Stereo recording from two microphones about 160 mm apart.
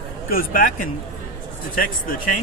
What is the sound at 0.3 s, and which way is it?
Speech, 65° left (ahead or behind).